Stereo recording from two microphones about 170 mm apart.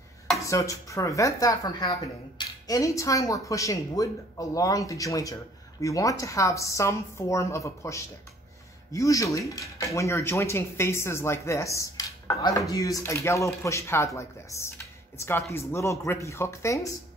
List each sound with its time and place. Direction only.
0.4 s speech: 20° left (ahead or behind)